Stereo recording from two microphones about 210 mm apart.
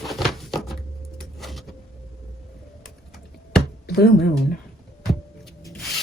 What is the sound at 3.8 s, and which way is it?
Music, 50° left (ahead or behind).